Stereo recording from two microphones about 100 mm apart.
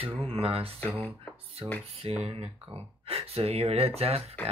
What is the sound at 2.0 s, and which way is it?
Speech, 85° right.